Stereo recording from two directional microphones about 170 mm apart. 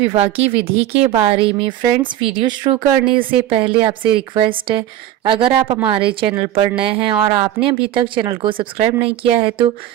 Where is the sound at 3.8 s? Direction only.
30° right (ahead or behind).